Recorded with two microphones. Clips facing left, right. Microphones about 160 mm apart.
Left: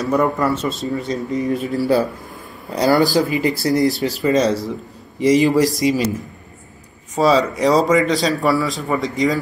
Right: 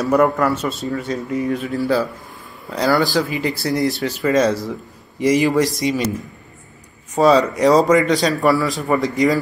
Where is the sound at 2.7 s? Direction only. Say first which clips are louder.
Left 2 dB; 10° left (ahead or behind).